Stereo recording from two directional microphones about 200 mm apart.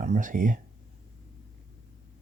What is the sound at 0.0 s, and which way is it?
Speech, 40° right (ahead or behind).